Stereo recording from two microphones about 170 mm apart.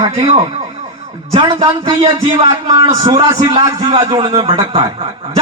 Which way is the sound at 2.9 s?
25° right (ahead or behind).